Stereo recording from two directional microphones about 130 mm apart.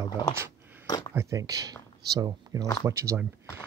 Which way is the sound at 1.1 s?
30° right (ahead or behind).